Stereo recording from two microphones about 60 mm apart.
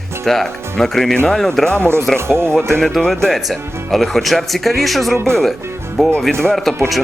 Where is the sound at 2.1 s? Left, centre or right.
Right.